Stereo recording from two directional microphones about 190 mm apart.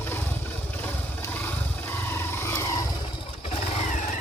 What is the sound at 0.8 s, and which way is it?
Wild animals, 10° left (ahead or behind).